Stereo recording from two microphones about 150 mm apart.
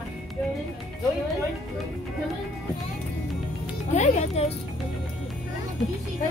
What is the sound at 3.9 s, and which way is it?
Speech, 50° left (ahead or behind).